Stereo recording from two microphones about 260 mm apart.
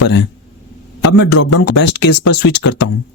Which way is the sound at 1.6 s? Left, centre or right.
Left.